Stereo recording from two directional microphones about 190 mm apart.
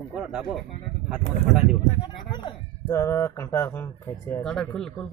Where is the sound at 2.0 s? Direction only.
25° left (ahead or behind); by 5.0 s centre (ahead or behind).